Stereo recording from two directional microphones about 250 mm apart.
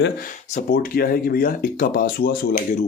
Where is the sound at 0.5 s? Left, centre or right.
Left.